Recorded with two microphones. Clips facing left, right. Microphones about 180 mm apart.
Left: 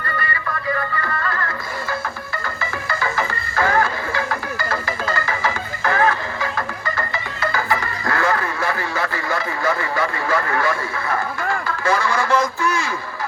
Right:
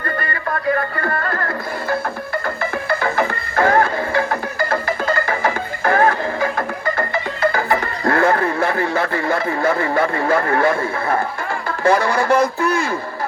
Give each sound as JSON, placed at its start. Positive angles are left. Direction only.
{"t": 1.0, "sound": "music", "side_deg": -50}
{"t": 8.1, "sound": "a sound", "side_deg": -55}
{"t": 8.6, "sound": "a man's voice", "side_deg": -55}